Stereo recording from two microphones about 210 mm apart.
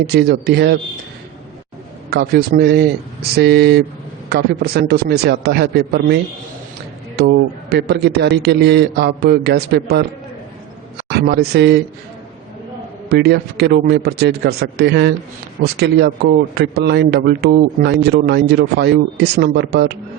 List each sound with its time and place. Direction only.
0.1 s a man's voice: 50° right (ahead or behind)
2.0 s a man's voice: 50° right (ahead or behind)
7.2 s a man's voice: 50° right (ahead or behind)
11.1 s a man's voice: 50° right (ahead or behind)
13.1 s a man's voice: 50° right (ahead or behind)